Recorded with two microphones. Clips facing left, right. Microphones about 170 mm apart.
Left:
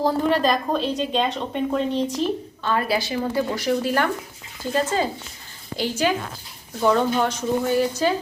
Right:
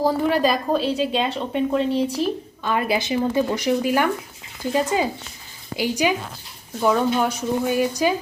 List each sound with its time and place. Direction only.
0.0 s a woman's voice: 10° right (ahead or behind)